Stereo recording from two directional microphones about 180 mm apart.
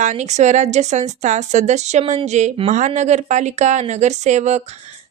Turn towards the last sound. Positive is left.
turn(degrees=-40)  # may be behind; listen again after turning